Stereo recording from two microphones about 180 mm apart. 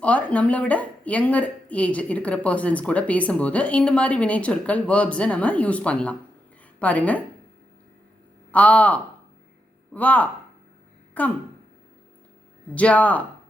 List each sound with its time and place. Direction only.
0.0 s a woman's voice: 5° left (ahead or behind)
8.5 s speech: 10° left (ahead or behind)
12.7 s speech: 5° left (ahead or behind)